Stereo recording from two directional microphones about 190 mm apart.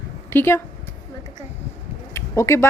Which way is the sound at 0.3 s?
10° left (ahead or behind).